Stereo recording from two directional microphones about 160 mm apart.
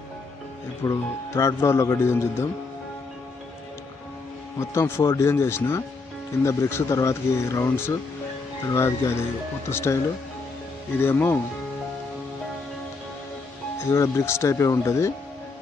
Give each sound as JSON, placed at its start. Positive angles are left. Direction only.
{"t": 0.8, "sound": "speech", "side_deg": 20}
{"t": 4.6, "sound": "speech", "side_deg": 15}
{"t": 11.0, "sound": "speech", "side_deg": 15}
{"t": 13.7, "sound": "speech", "side_deg": 20}